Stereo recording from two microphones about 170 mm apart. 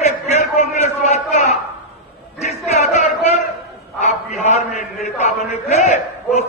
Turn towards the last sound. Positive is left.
turn(degrees=40)  # may be behind; listen again after turning